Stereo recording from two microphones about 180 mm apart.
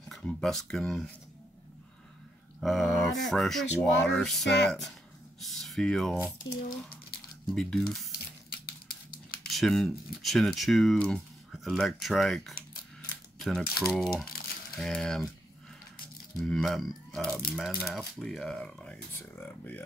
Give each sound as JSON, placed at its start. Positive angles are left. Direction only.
{"t": 0.1, "sound": "speech", "side_deg": 5}
{"t": 2.6, "sound": "speech", "side_deg": 0}
{"t": 7.4, "sound": "speech", "side_deg": 0}
{"t": 8.5, "sound": "a sound", "side_deg": 55}
{"t": 9.5, "sound": "speech", "side_deg": 0}
{"t": 16.3, "sound": "speech", "side_deg": 5}